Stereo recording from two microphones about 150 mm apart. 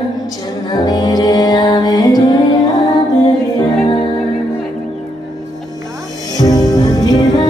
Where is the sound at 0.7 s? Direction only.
25° left (ahead or behind).